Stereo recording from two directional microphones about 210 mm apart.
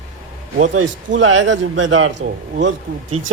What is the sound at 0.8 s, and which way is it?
A man's voice, 70° right (ahead or behind).